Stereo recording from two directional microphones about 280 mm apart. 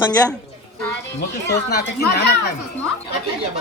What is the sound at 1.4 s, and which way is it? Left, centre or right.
Speech, left.